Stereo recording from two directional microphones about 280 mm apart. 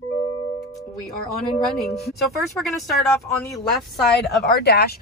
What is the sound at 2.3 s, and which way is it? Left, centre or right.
Speech, centre.